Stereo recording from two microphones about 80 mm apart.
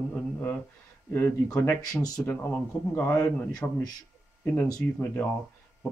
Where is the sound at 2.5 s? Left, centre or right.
Centre.